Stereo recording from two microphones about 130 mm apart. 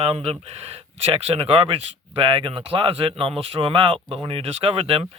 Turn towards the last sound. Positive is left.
turn(degrees=-50)  # may be behind; listen again after turning